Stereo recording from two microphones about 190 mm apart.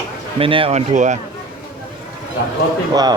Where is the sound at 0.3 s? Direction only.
30° right (ahead or behind).